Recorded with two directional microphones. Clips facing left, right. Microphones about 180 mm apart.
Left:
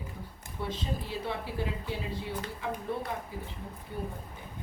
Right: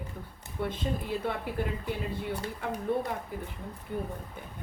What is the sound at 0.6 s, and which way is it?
Speech, 55° right (ahead or behind).